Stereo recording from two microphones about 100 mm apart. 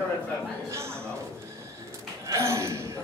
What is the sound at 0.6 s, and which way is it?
Speech, 25° right (ahead or behind).